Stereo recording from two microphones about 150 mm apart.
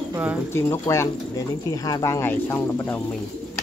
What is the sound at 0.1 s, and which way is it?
Speech, 10° right (ahead or behind).